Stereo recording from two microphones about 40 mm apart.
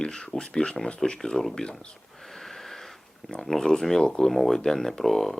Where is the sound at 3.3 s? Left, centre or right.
Centre.